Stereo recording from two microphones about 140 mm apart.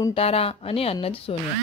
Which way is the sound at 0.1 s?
45° left (ahead or behind).